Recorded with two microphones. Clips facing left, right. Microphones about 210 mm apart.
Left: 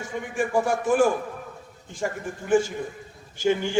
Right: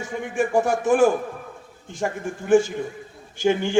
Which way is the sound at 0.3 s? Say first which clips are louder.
Right 3 dB; 45° right (ahead or behind).